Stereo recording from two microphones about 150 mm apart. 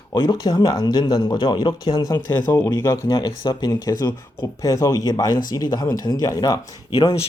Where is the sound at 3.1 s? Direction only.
30° left (ahead or behind).